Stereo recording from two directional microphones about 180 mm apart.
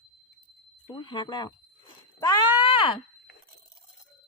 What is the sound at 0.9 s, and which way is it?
Speech, 25° left (ahead or behind).